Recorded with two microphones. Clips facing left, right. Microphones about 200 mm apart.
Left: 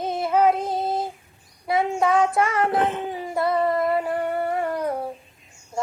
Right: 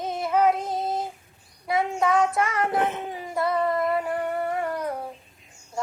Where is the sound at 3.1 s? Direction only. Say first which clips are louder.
Left 3 dB; 30° left (ahead or behind).